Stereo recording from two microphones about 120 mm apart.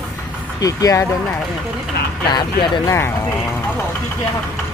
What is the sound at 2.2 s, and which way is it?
Speech, 40° left (ahead or behind).